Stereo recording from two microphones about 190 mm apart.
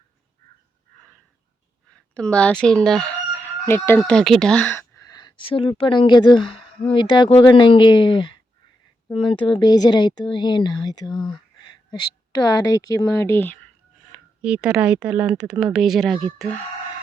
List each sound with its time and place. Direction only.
1.9 s crowing: 5° left (ahead or behind)
4.9 s speech: 20° left (ahead or behind)
14.1 s speech: 5° right (ahead or behind)